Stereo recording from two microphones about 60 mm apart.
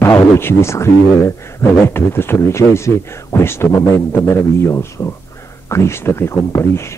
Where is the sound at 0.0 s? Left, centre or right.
Left.